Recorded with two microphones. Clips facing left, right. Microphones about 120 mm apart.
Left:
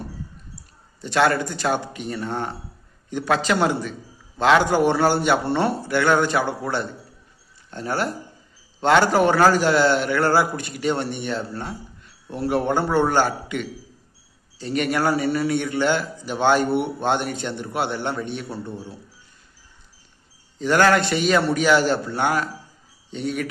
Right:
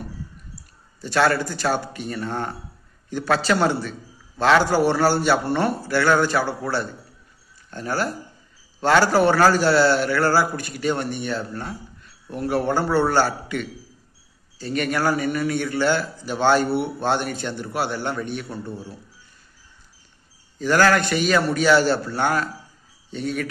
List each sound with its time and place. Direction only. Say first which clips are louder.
1.0 s a man's voice: even; 20° left (ahead or behind)
20.6 s a man's voice: left 1 dB; 20° left (ahead or behind)